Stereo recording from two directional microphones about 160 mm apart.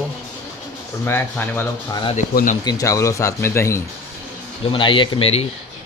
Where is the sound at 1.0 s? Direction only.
15° left (ahead or behind).